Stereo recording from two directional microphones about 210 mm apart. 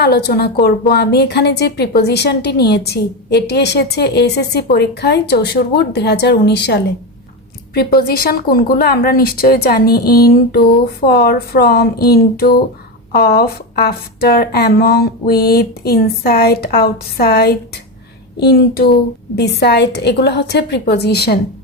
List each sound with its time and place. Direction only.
0.0 s a woman's voice: 50° left (ahead or behind)